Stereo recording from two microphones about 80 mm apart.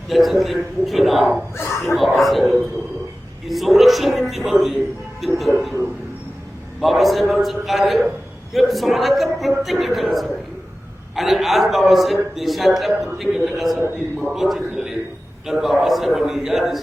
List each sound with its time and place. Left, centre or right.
0.1 s a man's voice: centre
1.5 s dog: left
2.0 s a man's voice: centre
6.8 s a man's voice: centre
14.3 s a sound: centre
15.4 s a man's voice: centre